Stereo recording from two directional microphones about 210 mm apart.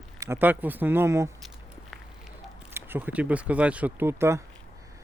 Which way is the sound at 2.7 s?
10° right (ahead or behind).